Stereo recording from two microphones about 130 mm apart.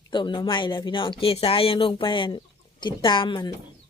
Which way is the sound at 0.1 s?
35° left (ahead or behind).